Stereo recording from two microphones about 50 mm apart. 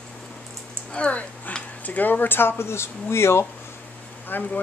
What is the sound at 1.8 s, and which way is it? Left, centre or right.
A woman's voice, left.